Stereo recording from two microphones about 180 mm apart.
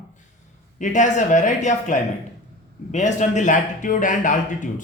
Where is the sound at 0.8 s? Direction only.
45° left (ahead or behind).